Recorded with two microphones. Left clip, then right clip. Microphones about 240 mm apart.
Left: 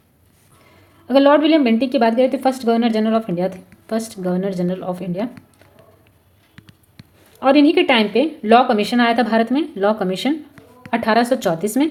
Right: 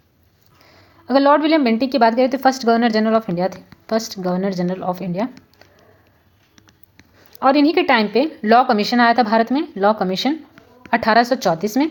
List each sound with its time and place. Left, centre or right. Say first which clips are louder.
1.0 s speech: left 1 dB; right
7.3 s speech: left 1 dB; right